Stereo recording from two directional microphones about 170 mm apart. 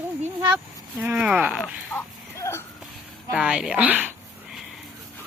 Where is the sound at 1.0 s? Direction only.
5° right (ahead or behind).